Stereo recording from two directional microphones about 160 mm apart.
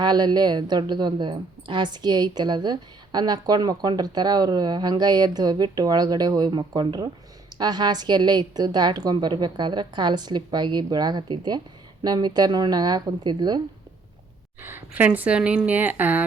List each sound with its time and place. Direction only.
0.0 s a woman's voice: 25° right (ahead or behind)
14.6 s a woman's voice: 15° right (ahead or behind)